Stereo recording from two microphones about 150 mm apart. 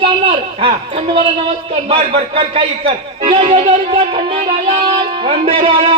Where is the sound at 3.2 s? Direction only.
40° right (ahead or behind).